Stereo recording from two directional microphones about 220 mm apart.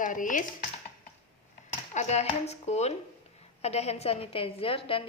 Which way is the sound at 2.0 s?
30° left (ahead or behind).